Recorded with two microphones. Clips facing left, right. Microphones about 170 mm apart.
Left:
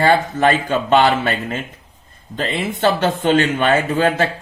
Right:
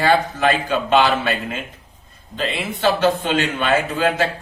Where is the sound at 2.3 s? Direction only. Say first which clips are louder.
Left 2 dB; 50° left (ahead or behind).